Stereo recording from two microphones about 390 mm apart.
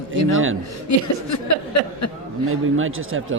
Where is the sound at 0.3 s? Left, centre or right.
Right.